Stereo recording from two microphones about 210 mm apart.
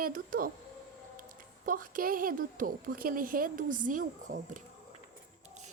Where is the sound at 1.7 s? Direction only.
40° right (ahead or behind).